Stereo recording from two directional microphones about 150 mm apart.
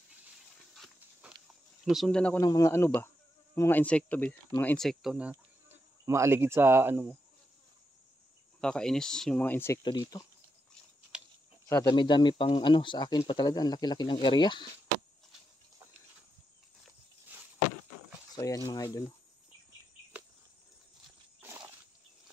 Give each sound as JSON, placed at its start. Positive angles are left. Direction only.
{"t": 1.9, "sound": "speech", "side_deg": 0}
{"t": 2.4, "sound": "speech", "side_deg": 20}
{"t": 5.3, "sound": "speech", "side_deg": -20}
{"t": 8.5, "sound": "speech", "side_deg": 5}
{"t": 9.8, "sound": "speech", "side_deg": 30}
{"t": 11.1, "sound": "cricket", "side_deg": -5}
{"t": 11.7, "sound": "speech", "side_deg": 30}
{"t": 17.3, "sound": "a sound", "side_deg": -10}
{"t": 18.3, "sound": "speech", "side_deg": 20}
{"t": 21.4, "sound": "a sound", "side_deg": -15}